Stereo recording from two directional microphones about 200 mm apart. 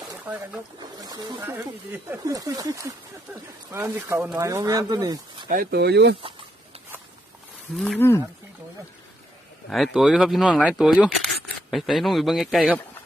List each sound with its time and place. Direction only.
0.1 s speech: 10° right (ahead or behind)
5.5 s speech: 50° right (ahead or behind)
7.8 s speech: 5° left (ahead or behind)
9.6 s speech: centre (ahead or behind)